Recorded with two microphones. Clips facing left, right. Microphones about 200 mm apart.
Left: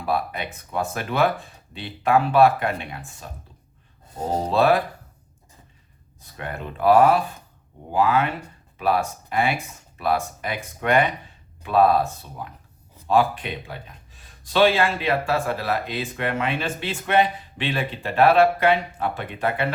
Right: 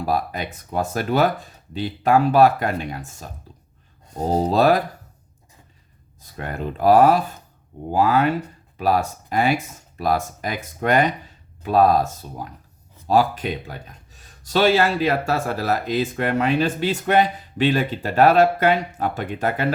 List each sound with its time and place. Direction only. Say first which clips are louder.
0.0 s speech: right 2 dB; 40° right (ahead or behind)
6.1 s speech: right 3 dB; 40° right (ahead or behind)